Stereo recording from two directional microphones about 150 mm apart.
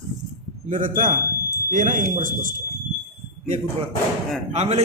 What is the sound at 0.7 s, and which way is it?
Speech, 65° right (ahead or behind).